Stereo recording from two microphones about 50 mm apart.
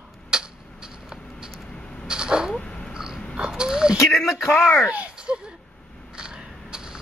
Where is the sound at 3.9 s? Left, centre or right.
Left.